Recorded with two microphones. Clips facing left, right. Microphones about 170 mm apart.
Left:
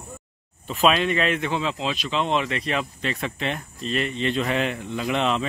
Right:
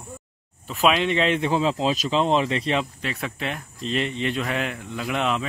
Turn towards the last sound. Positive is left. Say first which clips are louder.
# left 2 dB
turn(degrees=-5)  # may be behind; listen again after turning